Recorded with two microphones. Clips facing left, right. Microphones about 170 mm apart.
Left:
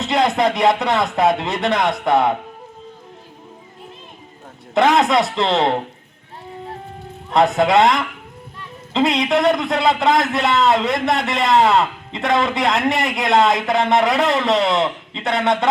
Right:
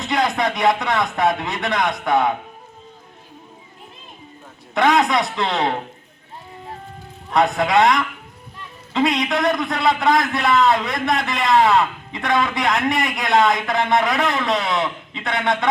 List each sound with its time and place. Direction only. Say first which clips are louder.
0.0 s a man's voice: left 3 dB; 25° left (ahead or behind)
4.7 s a man's voice: left 2 dB; 25° left (ahead or behind)
7.3 s a man's voice: left 3 dB; 25° left (ahead or behind)